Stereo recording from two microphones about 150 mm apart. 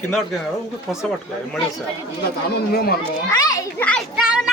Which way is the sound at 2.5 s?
90° left.